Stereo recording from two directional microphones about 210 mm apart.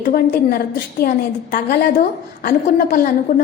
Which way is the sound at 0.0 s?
45° left (ahead or behind).